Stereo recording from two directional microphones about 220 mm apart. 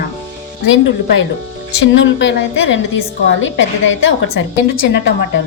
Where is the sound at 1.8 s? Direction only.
60° left (ahead or behind).